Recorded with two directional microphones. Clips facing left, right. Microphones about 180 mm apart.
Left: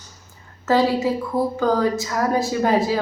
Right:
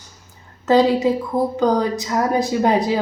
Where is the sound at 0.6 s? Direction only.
20° right (ahead or behind).